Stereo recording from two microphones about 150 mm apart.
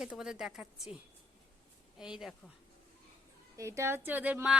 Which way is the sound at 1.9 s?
5° right (ahead or behind).